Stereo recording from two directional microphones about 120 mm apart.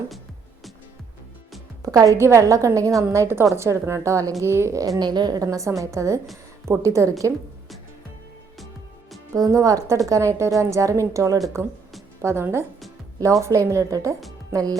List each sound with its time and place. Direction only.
1.8 s a woman's voice: 30° right (ahead or behind)
9.3 s a woman's voice: 30° right (ahead or behind)